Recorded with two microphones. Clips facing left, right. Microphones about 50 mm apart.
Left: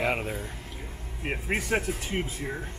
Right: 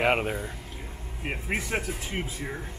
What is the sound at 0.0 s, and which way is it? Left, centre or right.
Speech, right.